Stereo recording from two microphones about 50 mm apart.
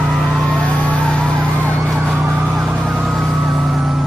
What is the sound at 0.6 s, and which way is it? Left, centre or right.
Vehicle, left.